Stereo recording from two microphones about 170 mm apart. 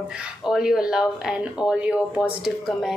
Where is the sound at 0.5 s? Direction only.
Centre (ahead or behind).